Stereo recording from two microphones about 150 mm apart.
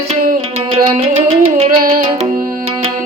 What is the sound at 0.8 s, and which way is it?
Music, 40° right (ahead or behind).